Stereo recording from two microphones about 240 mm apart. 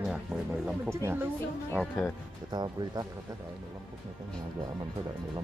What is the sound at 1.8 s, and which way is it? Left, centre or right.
Speech, centre.